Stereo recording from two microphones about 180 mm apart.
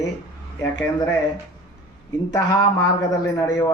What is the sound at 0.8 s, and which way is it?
Speech, 15° left (ahead or behind).